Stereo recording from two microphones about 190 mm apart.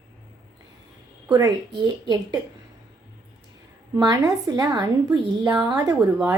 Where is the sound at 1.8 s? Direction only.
20° right (ahead or behind).